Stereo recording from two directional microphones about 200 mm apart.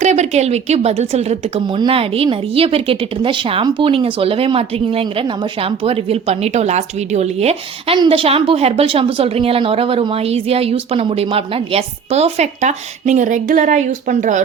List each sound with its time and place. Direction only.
0.0 s speech: 35° right (ahead or behind)